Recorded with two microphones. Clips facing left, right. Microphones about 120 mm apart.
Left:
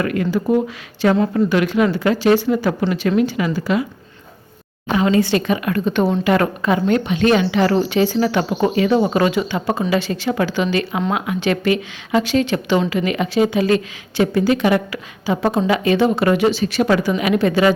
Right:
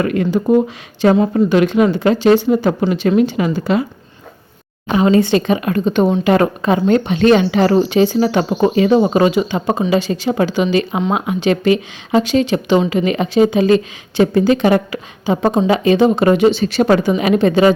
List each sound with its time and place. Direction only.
0.0 s speech: 25° right (ahead or behind)
4.9 s speech: 25° right (ahead or behind)
7.8 s speech: 20° right (ahead or behind)